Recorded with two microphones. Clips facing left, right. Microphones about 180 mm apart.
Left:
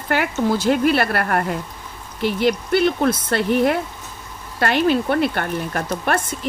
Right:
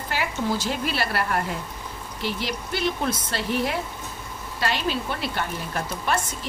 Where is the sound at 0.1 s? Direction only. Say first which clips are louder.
Left 7 dB; 60° left (ahead or behind).